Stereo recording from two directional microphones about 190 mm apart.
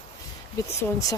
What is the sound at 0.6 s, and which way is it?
Speech, 15° left (ahead or behind).